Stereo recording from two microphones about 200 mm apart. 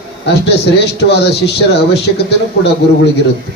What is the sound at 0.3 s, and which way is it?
Speech, 55° left (ahead or behind).